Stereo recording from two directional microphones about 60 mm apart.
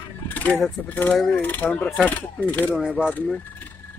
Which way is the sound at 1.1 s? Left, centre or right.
Centre.